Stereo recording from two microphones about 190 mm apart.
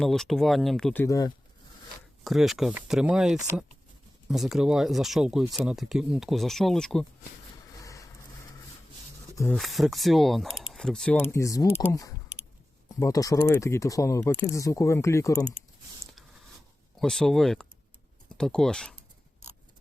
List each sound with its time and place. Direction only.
0.0 s speech: centre (ahead or behind)
1.0 s speech: 20° left (ahead or behind)
2.2 s speech: centre (ahead or behind)
7.8 s vehicle: 15° left (ahead or behind)
9.5 s speech: centre (ahead or behind)
11.3 s speech: 15° left (ahead or behind)
17.0 s speech: centre (ahead or behind)